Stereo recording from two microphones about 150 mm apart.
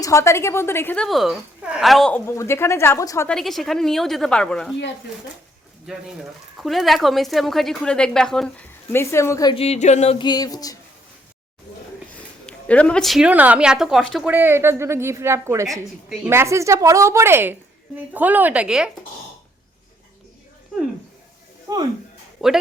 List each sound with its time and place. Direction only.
0.0 s a woman's voice: 20° left (ahead or behind)
1.0 s a woman's voice: centre (ahead or behind)
2.2 s a woman's voice: 20° left (ahead or behind)
3.2 s a woman's voice: centre (ahead or behind)
5.9 s a woman's voice: 5° right (ahead or behind)
8.9 s a woman's voice: 15° left (ahead or behind)
9.5 s speech: 45° left (ahead or behind)
10.2 s a sound: 30° left (ahead or behind)
12.5 s a woman's voice: 10° left (ahead or behind)
14.3 s speech: 15° right (ahead or behind)
21.7 s speech: 25° right (ahead or behind)
22.4 s speech: centre (ahead or behind)